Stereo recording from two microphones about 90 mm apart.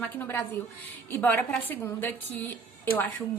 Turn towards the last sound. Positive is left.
turn(degrees=20)  # may be behind; listen again after turning